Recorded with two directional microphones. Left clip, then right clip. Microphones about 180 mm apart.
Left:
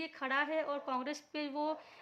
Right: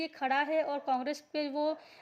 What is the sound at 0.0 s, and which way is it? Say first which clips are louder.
A woman's voice: right 4 dB; 15° right (ahead or behind).